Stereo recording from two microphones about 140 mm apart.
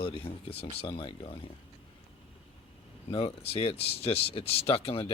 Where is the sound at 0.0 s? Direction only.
40° left (ahead or behind).